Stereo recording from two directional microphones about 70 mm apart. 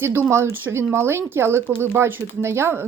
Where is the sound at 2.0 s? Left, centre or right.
Right.